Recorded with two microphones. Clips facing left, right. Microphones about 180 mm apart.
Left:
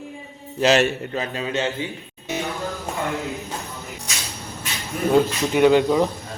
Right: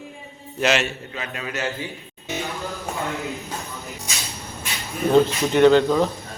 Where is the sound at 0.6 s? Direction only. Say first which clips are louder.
Left 4 dB; 35° left (ahead or behind).